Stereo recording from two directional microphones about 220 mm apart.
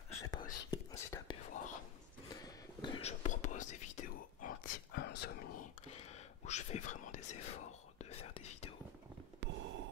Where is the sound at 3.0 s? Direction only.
30° left (ahead or behind).